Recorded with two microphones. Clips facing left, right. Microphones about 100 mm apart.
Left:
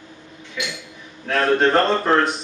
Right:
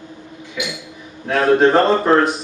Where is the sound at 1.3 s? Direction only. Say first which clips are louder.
Right 4 dB; 5° right (ahead or behind).